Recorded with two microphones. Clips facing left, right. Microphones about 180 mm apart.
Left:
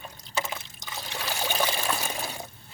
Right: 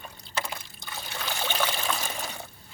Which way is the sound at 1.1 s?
10° left (ahead or behind).